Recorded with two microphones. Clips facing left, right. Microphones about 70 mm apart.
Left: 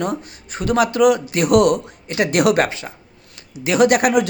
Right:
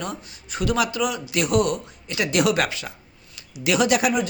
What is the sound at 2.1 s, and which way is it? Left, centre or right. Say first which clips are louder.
Speech: left 5 dB; left.